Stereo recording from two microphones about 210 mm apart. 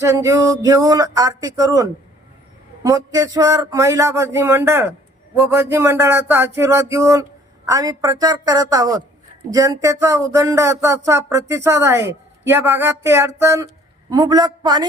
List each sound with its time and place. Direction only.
0.0 s a man's voice: 15° right (ahead or behind)